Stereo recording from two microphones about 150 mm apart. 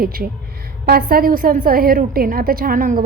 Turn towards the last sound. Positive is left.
turn(degrees=-65)  # may be behind; listen again after turning